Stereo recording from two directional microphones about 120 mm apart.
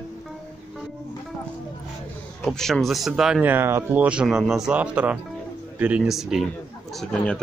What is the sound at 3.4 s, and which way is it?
A man's voice, 15° right (ahead or behind).